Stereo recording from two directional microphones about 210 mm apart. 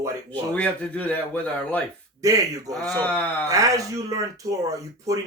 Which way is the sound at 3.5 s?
15° right (ahead or behind).